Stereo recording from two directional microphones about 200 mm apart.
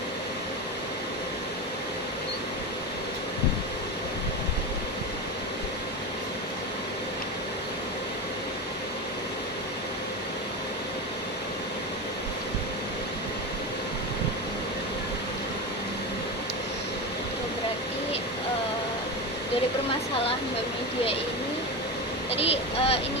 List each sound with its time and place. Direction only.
22.3 s vehicle: 30° left (ahead or behind)